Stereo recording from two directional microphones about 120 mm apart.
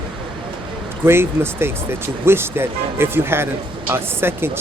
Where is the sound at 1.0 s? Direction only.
20° right (ahead or behind).